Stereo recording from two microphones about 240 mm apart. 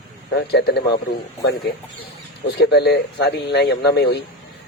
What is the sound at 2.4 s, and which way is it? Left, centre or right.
Speech, left.